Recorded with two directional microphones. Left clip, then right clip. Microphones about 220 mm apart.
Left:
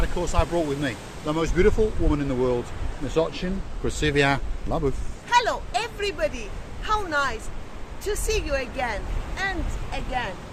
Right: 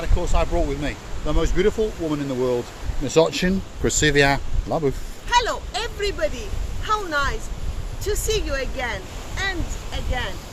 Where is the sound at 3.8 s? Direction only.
25° right (ahead or behind).